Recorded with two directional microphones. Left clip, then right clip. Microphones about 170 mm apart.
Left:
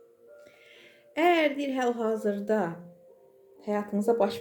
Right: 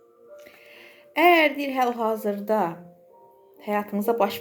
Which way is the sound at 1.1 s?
15° left (ahead or behind).